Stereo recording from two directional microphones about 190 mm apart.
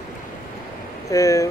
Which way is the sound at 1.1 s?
15° left (ahead or behind).